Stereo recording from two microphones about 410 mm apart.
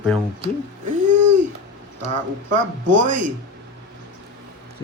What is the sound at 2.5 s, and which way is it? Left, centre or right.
Speech, centre.